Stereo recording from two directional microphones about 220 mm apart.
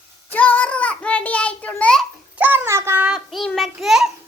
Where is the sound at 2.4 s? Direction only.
10° right (ahead or behind).